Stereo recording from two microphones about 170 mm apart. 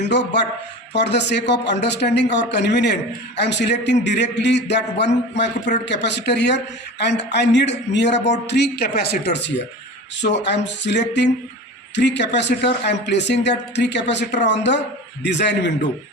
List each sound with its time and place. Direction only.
0.1 s a man's voice: 90° left